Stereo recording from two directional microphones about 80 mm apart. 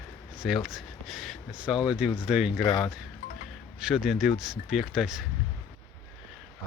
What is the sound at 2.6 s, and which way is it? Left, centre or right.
Speech, left.